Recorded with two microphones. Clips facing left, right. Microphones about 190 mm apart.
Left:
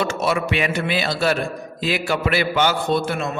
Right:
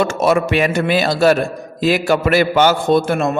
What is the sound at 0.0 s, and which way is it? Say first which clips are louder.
A man's voice: right 6 dB; 45° right (ahead or behind).